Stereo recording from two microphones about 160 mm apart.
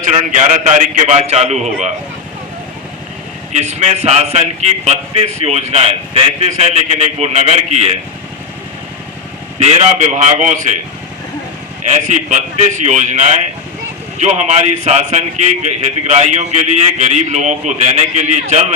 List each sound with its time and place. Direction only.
0.1 s a man's voice: 50° right (ahead or behind)
3.5 s a man's voice: 45° right (ahead or behind)
9.6 s a man's voice: 45° right (ahead or behind)
12.0 s a man's voice: 50° right (ahead or behind)